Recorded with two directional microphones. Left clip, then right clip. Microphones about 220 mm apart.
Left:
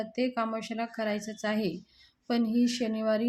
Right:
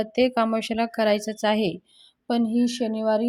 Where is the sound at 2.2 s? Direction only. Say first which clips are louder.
Right 5 dB; 20° right (ahead or behind).